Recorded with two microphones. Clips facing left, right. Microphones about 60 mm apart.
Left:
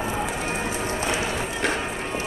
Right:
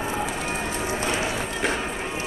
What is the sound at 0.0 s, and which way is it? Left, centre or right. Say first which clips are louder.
Bird: even; centre.